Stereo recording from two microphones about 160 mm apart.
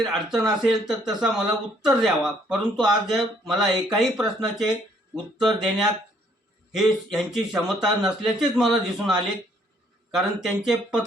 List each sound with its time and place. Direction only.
0.0 s speech: centre (ahead or behind)